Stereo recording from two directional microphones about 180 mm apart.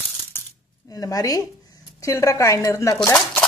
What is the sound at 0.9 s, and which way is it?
A woman's voice, 20° left (ahead or behind).